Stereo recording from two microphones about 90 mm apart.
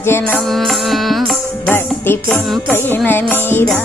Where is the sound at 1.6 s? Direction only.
25° left (ahead or behind).